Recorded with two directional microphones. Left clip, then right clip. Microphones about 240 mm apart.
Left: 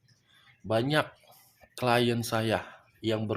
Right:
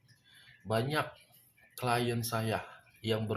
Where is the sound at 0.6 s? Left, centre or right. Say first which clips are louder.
Left 5 dB; left.